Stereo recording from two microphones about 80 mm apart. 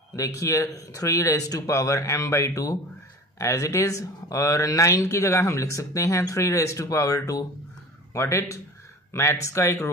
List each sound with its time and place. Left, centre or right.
0.1 s speech: left